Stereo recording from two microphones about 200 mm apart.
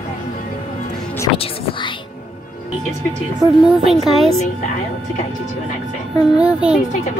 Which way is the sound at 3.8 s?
Centre (ahead or behind).